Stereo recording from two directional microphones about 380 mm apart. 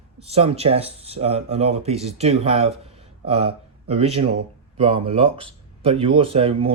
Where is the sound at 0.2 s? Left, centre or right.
Centre.